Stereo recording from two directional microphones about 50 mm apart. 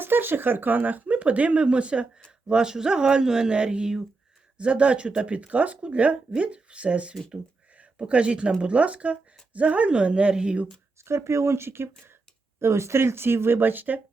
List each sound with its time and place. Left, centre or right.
0.0 s speech: right
11.0 s speech: right